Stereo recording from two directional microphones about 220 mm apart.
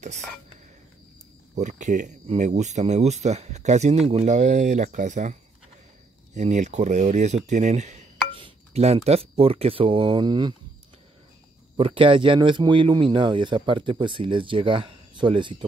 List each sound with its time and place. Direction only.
1.5 s speech: 35° right (ahead or behind)
11.7 s speech: 25° right (ahead or behind)